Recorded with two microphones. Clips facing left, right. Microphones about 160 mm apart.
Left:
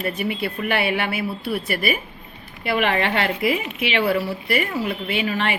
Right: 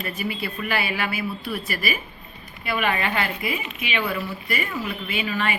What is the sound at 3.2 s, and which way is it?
Speech, 70° left (ahead or behind).